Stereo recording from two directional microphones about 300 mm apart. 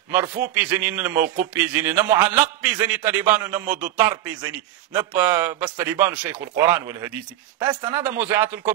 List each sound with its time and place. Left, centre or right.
0.1 s a man's voice: centre